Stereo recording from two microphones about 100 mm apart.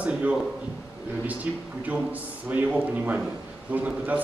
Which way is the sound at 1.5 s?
15° right (ahead or behind).